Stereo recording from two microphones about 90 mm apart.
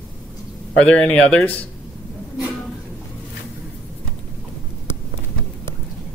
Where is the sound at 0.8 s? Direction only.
10° left (ahead or behind).